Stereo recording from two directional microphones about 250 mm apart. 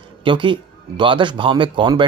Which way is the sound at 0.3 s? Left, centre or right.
Centre.